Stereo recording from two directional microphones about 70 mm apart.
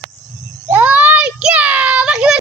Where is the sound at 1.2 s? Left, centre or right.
Centre.